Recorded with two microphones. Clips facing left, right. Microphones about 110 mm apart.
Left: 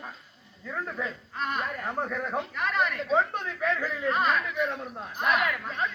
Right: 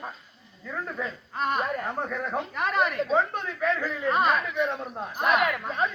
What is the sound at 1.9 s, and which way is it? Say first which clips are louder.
Speech: right 1 dB; centre (ahead or behind).